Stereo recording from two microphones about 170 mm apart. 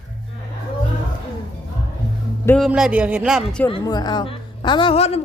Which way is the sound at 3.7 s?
30° left (ahead or behind).